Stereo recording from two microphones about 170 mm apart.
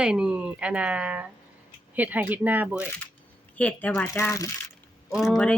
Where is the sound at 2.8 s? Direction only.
15° left (ahead or behind).